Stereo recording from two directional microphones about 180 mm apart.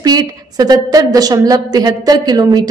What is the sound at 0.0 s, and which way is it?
A woman's voice, 20° right (ahead or behind).